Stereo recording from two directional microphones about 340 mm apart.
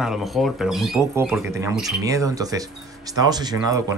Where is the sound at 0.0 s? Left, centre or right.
Centre.